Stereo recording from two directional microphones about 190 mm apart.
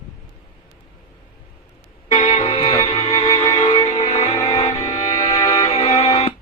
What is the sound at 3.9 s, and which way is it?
Music, 30° left (ahead or behind).